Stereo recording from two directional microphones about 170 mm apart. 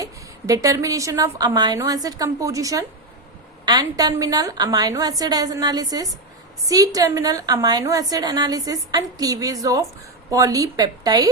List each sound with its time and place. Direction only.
0.0 s a woman's voice: 20° right (ahead or behind)